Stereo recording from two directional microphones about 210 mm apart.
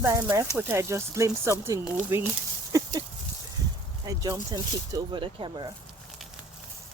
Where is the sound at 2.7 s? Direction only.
15° right (ahead or behind).